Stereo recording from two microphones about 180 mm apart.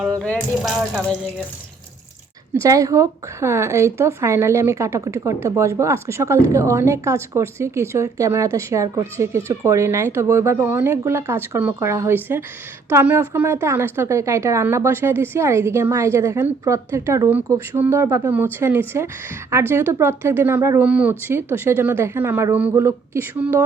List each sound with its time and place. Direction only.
0.2 s speech: 5° left (ahead or behind)
2.6 s speech: 20° right (ahead or behind)